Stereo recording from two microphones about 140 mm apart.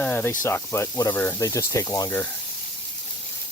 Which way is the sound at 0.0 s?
10° left (ahead or behind).